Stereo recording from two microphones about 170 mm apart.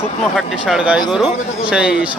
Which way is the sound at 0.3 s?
5° right (ahead or behind).